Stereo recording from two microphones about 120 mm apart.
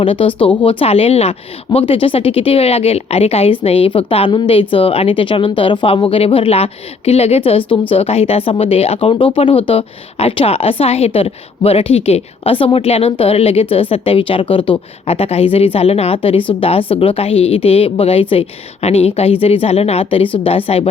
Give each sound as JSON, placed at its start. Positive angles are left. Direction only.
{"t": 0.0, "sound": "a woman's voice", "side_deg": 50}